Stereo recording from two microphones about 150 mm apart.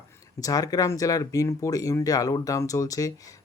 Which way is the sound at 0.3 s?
25° left (ahead or behind).